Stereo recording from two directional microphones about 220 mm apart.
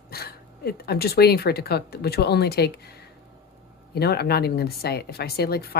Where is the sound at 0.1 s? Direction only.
45° left (ahead or behind).